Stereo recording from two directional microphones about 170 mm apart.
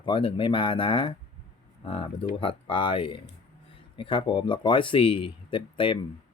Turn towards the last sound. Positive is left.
turn(degrees=30)  # may be behind; listen again after turning